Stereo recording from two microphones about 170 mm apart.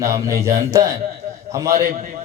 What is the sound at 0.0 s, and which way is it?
Speech, 20° right (ahead or behind).